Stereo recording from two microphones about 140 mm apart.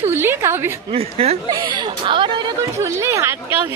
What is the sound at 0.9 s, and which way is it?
Speech, 45° right (ahead or behind).